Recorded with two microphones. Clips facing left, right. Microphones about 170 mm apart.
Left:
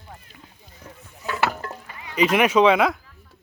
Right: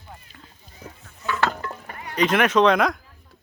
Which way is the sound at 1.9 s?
50° right (ahead or behind).